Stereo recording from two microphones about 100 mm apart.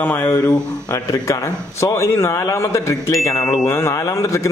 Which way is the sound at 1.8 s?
25° left (ahead or behind).